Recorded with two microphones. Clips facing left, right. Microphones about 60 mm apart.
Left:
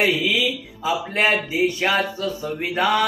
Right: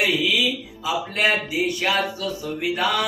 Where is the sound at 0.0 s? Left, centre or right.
Left.